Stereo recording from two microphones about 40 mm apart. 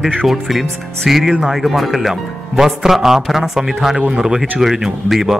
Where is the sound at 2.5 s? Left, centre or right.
Centre.